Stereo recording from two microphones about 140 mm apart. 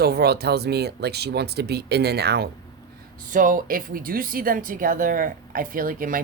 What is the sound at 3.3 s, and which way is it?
Speech, 70° right (ahead or behind).